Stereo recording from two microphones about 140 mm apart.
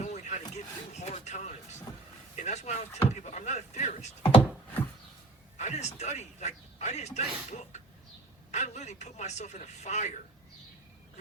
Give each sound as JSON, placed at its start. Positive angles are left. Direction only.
{"t": 0.0, "sound": "a sound", "side_deg": 55}
{"t": 0.5, "sound": "vehicle", "side_deg": 55}
{"t": 2.3, "sound": "speech", "side_deg": 55}
{"t": 5.5, "sound": "speech", "side_deg": 55}